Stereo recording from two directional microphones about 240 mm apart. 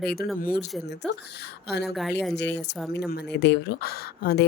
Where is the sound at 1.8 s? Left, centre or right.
Centre.